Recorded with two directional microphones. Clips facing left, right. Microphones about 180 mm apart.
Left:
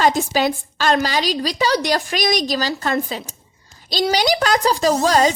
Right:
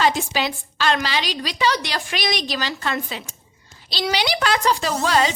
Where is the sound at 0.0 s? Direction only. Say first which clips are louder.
Left 4 dB; 45° left (ahead or behind).